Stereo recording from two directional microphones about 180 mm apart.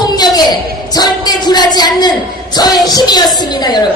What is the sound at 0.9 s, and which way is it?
Speech, 20° left (ahead or behind).